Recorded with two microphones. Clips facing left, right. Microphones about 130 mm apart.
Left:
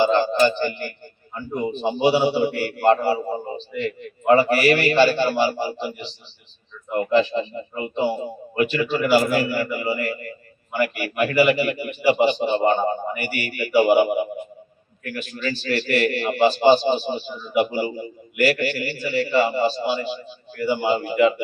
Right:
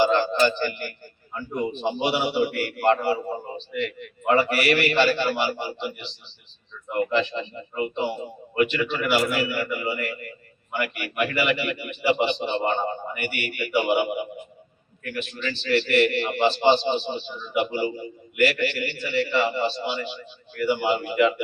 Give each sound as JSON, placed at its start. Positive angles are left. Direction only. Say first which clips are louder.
{"t": 0.0, "sound": "a sound", "louder": "left 2 dB", "side_deg": 30}
{"t": 1.4, "sound": "a man's voice", "louder": "left 2 dB", "side_deg": 30}
{"t": 17.1, "sound": "a man's voice", "louder": "left 3 dB", "side_deg": 5}
{"t": 17.6, "sound": "a man's voice", "louder": "left 3 dB", "side_deg": 35}